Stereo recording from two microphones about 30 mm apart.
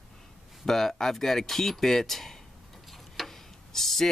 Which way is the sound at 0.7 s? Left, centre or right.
Centre.